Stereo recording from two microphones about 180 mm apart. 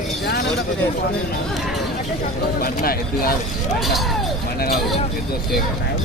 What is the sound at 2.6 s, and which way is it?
Speech, 55° left (ahead or behind).